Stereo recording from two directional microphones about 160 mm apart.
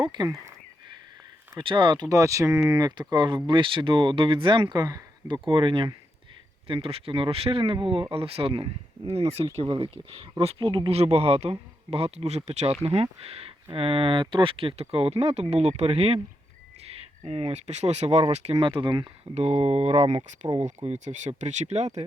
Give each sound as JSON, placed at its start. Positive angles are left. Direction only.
{"t": 0.0, "sound": "speech", "side_deg": -25}
{"t": 1.5, "sound": "speech", "side_deg": -30}
{"t": 18.5, "sound": "speech", "side_deg": -30}
{"t": 19.3, "sound": "speech", "side_deg": -40}